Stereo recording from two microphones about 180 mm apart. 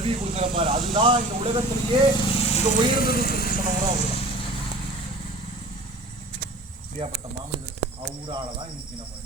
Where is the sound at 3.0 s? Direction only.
55° left (ahead or behind).